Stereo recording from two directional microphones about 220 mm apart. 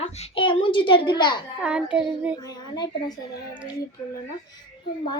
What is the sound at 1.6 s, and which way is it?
Child singing, 5° right (ahead or behind).